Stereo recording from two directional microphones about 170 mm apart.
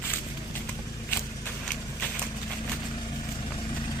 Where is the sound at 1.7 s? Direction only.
10° left (ahead or behind).